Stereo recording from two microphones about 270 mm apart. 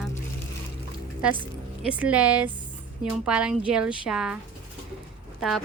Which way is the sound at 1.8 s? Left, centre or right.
Centre.